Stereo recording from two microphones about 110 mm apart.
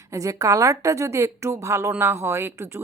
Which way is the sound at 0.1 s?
30° right (ahead or behind).